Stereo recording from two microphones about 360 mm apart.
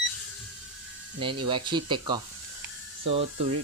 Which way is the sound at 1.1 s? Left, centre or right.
Centre.